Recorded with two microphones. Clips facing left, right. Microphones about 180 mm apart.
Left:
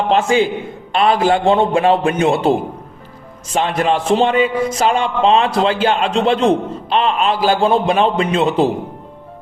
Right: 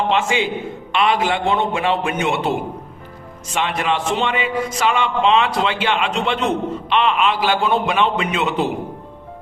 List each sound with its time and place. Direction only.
0.1 s a man's voice: 40° left (ahead or behind)